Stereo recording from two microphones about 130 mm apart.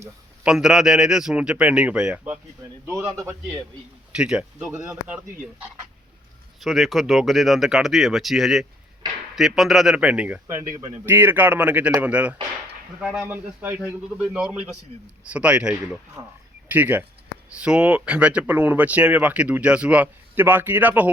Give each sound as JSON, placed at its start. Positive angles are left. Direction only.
{"t": 0.4, "sound": "speech", "side_deg": -5}
{"t": 2.8, "sound": "a man's voice", "side_deg": -20}
{"t": 4.1, "sound": "speech", "side_deg": -5}
{"t": 6.6, "sound": "speech", "side_deg": 0}
{"t": 10.4, "sound": "a man's voice", "side_deg": -25}
{"t": 16.2, "sound": "a man's voice", "side_deg": -20}